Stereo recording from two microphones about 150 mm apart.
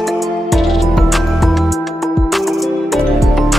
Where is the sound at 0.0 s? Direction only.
Centre (ahead or behind).